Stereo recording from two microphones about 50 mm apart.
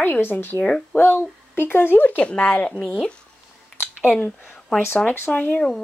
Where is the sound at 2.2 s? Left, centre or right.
Left.